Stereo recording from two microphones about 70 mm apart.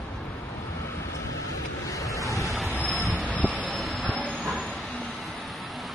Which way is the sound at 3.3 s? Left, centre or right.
Left.